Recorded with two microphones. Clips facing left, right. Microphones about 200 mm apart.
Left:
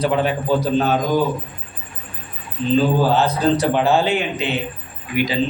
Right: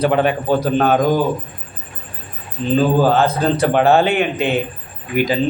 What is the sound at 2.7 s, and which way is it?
A man's voice, 50° right (ahead or behind).